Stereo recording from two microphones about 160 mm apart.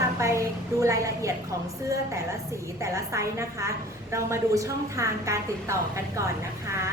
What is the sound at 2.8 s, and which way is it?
A woman's voice, 20° right (ahead or behind).